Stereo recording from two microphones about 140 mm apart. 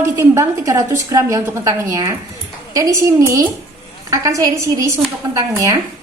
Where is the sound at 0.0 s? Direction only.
20° right (ahead or behind).